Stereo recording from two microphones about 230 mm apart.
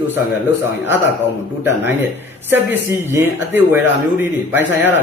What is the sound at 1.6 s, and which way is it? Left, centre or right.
Speech, centre.